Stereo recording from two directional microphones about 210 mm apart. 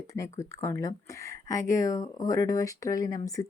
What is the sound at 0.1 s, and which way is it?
Speech, 15° left (ahead or behind).